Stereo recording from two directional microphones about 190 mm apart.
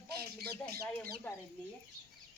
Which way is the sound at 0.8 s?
5° left (ahead or behind).